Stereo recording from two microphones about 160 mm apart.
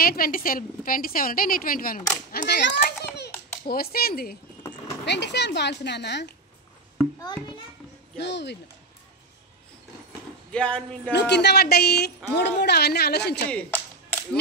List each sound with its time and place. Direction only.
0.0 s a woman's voice: 65° left (ahead or behind)
2.3 s a child's voice: 75° left (ahead or behind)
3.2 s a sound: 70° left (ahead or behind)
5.0 s speech: 90° left
7.2 s a child's voice: 25° left (ahead or behind)
8.2 s speech: 90° left
10.5 s speech: 5° left (ahead or behind)
11.1 s speech: 90° left
13.5 s clapping: 10° left (ahead or behind)